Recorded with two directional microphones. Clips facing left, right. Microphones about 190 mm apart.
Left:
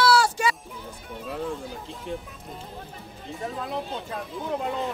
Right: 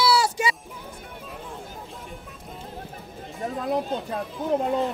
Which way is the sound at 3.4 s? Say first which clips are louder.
Right 5 dB; 45° right (ahead or behind).